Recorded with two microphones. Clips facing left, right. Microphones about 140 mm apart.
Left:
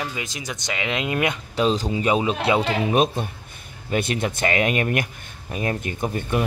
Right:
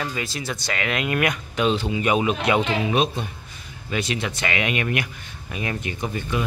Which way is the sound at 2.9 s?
45° left (ahead or behind).